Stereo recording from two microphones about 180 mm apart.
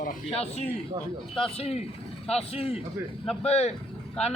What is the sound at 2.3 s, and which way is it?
Speech, 35° left (ahead or behind).